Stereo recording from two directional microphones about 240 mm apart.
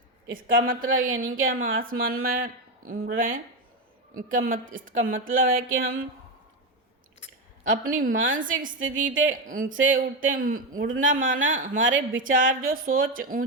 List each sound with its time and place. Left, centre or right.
0.4 s a woman's voice: right
0.8 s speech: right
1.5 s a woman's voice: right
7.7 s a woman's voice: right